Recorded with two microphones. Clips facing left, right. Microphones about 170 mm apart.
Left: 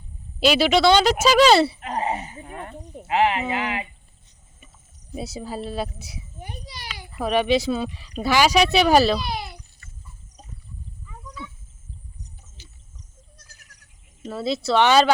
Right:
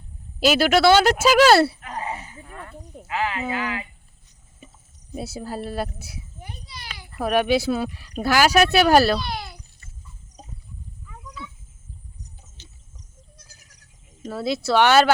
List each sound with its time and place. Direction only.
0.3 s speech: centre (ahead or behind)
1.8 s a sound: 20° left (ahead or behind)
3.0 s speech: 25° left (ahead or behind)
5.1 s speech: centre (ahead or behind)
6.4 s a sound: 20° left (ahead or behind)
7.2 s speech: 5° right (ahead or behind)
14.3 s speech: centre (ahead or behind)